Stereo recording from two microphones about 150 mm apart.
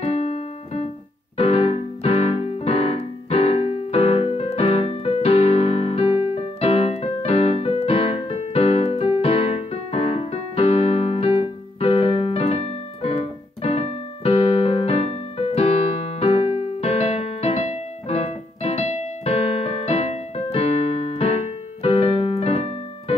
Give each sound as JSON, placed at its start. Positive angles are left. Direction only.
{"t": 0.0, "sound": "keyboard", "side_deg": 45}